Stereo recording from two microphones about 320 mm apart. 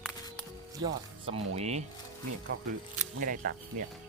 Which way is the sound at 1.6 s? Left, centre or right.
Centre.